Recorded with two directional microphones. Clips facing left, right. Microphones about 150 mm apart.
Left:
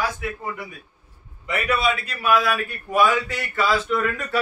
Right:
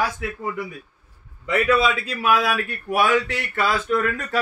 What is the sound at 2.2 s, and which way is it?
Speech, 85° right.